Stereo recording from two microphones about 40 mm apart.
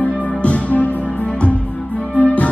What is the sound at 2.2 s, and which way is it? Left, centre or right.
Music, left.